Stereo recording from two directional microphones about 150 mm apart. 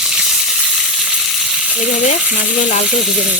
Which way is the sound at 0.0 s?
Centre (ahead or behind).